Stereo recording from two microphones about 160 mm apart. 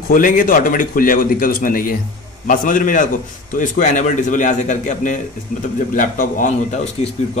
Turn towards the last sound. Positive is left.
turn(degrees=45)  # may be behind; listen again after turning